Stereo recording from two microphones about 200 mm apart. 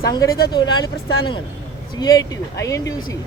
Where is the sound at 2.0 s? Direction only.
20° left (ahead or behind).